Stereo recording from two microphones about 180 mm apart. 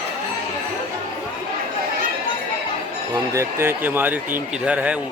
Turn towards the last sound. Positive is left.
turn(degrees=-5)  # may be behind; listen again after turning